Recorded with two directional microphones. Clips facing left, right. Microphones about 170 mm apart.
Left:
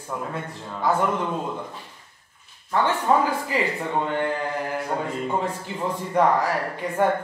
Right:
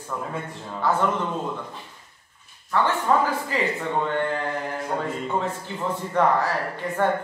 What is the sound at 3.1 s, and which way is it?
Speech, 15° left (ahead or behind).